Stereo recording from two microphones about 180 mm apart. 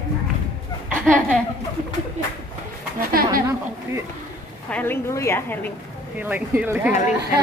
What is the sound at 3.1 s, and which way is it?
Speech, 55° right (ahead or behind).